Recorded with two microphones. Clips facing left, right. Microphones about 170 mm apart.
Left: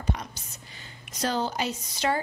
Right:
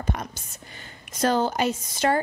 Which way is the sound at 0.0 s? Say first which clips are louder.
Right 2 dB; 50° right (ahead or behind).